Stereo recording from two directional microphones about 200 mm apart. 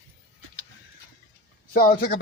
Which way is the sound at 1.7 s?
50° left (ahead or behind).